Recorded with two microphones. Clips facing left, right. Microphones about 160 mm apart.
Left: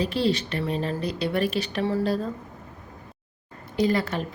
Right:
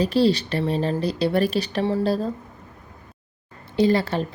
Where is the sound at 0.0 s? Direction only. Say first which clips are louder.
Right 5 dB; 35° right (ahead or behind).